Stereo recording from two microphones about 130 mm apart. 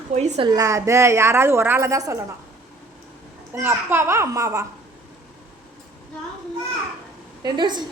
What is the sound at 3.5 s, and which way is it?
A woman's voice, 20° right (ahead or behind).